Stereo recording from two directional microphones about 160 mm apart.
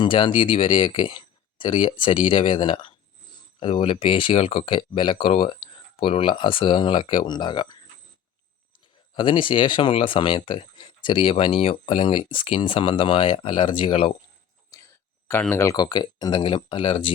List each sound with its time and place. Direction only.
0.0 s speech: 30° left (ahead or behind)
9.1 s speech: 30° left (ahead or behind)
15.3 s speech: 15° left (ahead or behind); by 17.1 s 30° left (ahead or behind)